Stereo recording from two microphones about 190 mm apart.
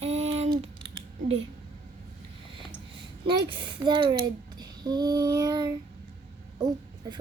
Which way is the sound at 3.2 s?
25° right (ahead or behind).